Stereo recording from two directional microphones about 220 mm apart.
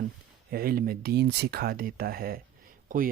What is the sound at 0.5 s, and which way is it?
Speech, 40° right (ahead or behind).